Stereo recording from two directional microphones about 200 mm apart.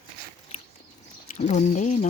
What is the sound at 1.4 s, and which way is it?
Speech, 35° left (ahead or behind).